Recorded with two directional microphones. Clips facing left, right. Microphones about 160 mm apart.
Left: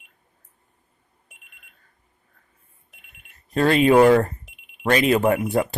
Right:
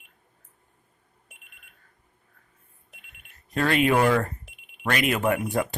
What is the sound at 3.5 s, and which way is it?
Speech, 30° left (ahead or behind).